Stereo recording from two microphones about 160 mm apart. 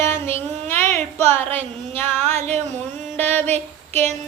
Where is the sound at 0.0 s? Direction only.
15° left (ahead or behind).